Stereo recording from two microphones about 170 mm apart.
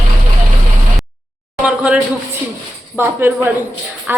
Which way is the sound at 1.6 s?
5° right (ahead or behind).